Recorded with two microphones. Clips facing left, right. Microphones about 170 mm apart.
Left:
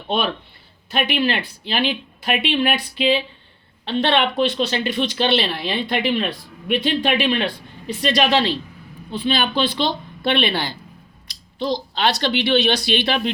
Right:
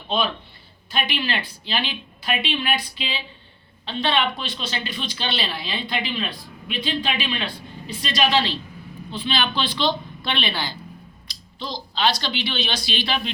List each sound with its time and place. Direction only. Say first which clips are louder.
1.0 s a woman's voice: left 6 dB; 55° left (ahead or behind)